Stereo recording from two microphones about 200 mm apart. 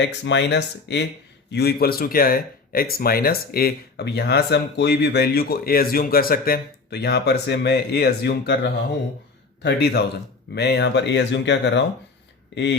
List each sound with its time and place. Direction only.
0.0 s speech: 60° left (ahead or behind)